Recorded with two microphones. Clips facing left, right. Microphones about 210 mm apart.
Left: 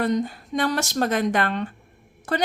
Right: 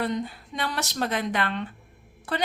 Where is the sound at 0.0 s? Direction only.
45° left (ahead or behind).